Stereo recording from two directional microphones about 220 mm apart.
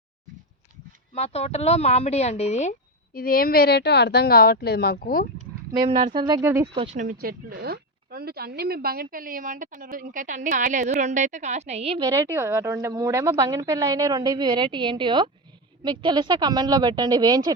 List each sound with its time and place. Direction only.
1.1 s speech: 30° left (ahead or behind)
5.9 s a woman's voice: 35° right (ahead or behind)
6.1 s speech: 20° right (ahead or behind)
6.7 s a woman's voice: 30° right (ahead or behind)